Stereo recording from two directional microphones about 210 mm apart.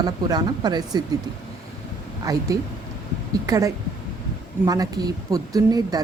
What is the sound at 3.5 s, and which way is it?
Speech, 15° right (ahead or behind).